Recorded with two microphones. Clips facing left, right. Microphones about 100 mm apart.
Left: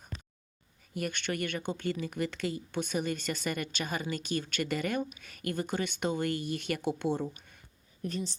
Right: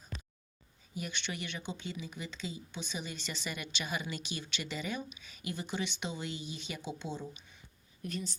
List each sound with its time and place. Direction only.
0.9 s speech: 50° left (ahead or behind)
8.0 s speech: 35° left (ahead or behind)